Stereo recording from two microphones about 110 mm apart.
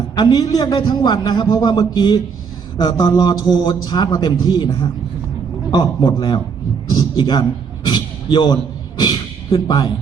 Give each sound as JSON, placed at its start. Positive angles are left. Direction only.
{"t": 0.2, "sound": "a man's voice", "side_deg": 35}
{"t": 7.9, "sound": "a sound", "side_deg": 45}
{"t": 9.0, "sound": "speech", "side_deg": 40}